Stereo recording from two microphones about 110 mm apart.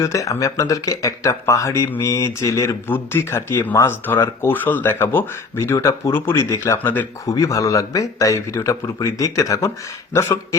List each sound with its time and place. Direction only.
0.0 s speech: 30° left (ahead or behind)
7.3 s speech: 30° left (ahead or behind)